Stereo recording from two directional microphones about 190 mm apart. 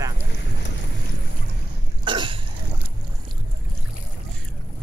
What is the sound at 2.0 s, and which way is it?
Cough, 25° right (ahead or behind).